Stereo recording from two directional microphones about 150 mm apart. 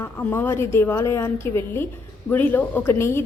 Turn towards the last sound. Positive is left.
turn(degrees=15)  # may be behind; listen again after turning